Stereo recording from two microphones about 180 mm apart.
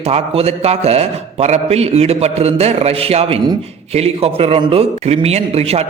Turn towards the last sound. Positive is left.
turn(degrees=-35)  # may be behind; listen again after turning